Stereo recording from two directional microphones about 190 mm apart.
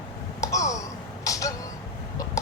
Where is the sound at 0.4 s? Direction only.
15° left (ahead or behind).